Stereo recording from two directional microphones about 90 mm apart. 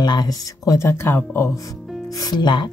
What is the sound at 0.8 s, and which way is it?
Speech, 25° left (ahead or behind).